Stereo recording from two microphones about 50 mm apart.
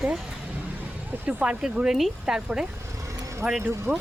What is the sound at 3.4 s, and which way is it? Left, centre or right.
Speech, right.